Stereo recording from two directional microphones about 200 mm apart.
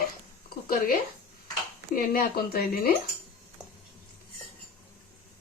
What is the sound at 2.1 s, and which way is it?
Speech, 50° left (ahead or behind).